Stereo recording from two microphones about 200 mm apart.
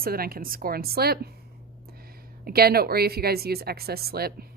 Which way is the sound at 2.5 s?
50° right (ahead or behind).